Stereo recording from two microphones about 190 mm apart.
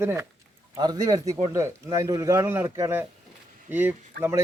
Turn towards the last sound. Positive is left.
turn(degrees=-10)  # may be behind; listen again after turning